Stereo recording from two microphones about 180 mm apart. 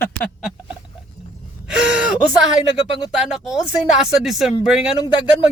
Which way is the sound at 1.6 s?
5° right (ahead or behind).